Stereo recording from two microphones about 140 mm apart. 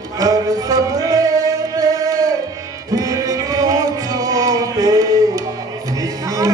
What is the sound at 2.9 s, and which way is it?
Music, 25° right (ahead or behind).